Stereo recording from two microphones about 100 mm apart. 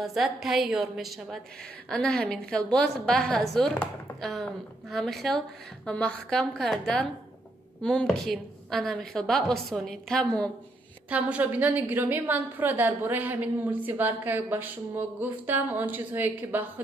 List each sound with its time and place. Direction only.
0.0 s a woman's voice: centre (ahead or behind)
11.1 s a woman's voice: 15° right (ahead or behind)